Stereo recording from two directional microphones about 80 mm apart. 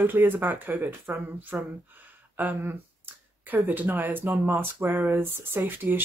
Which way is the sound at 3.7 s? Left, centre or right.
Right.